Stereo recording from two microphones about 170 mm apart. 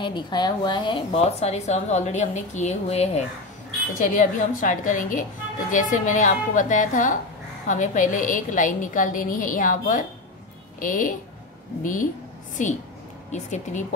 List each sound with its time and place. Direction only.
0.0 s a woman's voice: 25° left (ahead or behind); by 13.8 s 45° left (ahead or behind)